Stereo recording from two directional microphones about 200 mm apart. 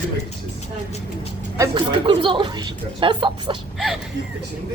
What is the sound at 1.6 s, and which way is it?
A woman's voice, 25° right (ahead or behind).